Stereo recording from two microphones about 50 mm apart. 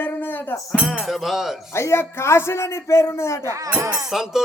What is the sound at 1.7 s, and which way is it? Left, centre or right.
A man's voice, left.